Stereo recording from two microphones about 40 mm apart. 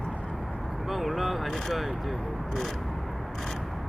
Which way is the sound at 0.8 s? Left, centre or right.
Centre.